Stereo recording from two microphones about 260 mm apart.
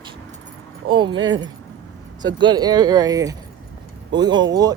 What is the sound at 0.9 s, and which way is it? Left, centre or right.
Speech, centre.